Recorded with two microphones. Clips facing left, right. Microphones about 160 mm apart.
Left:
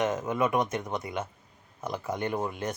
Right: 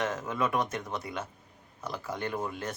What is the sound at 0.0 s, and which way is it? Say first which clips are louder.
Speech: left 4 dB; 20° left (ahead or behind).